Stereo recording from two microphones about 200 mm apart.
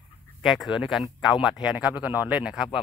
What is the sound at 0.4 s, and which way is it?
Speech, centre (ahead or behind).